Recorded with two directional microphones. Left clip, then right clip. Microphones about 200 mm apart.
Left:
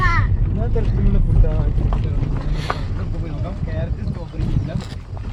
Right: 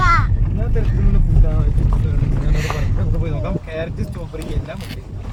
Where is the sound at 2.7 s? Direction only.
45° left (ahead or behind).